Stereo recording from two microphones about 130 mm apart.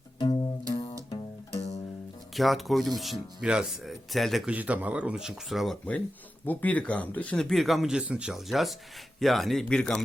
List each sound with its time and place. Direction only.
0.2 s music: 35° left (ahead or behind)
2.3 s speech: centre (ahead or behind)
4.5 s speech: 10° right (ahead or behind); by 10.0 s 10° left (ahead or behind)